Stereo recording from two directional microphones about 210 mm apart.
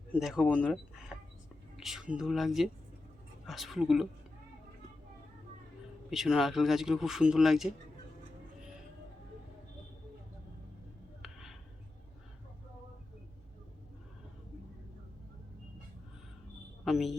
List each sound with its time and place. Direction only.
0.1 s speech: centre (ahead or behind)
6.1 s speech: centre (ahead or behind)
11.2 s a sound: centre (ahead or behind)
16.8 s a woman's voice: centre (ahead or behind)